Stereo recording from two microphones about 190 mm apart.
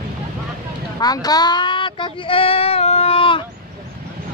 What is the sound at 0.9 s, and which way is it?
Speech, 20° left (ahead or behind).